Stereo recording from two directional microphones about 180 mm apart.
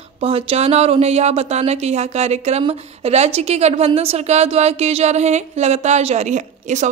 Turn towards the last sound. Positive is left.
turn(degrees=-40)  # may be behind; listen again after turning